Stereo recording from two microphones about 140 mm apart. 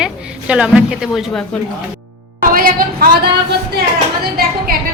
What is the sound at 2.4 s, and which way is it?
Music, 90° right.